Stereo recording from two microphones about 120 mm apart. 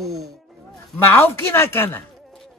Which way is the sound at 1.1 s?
20° left (ahead or behind).